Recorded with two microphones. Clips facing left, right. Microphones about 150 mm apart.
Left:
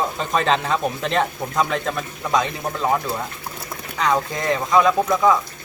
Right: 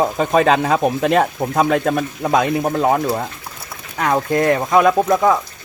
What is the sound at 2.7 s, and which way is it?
Speech, 45° right (ahead or behind).